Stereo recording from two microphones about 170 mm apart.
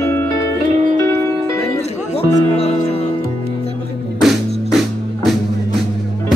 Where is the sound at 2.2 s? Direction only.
35° left (ahead or behind).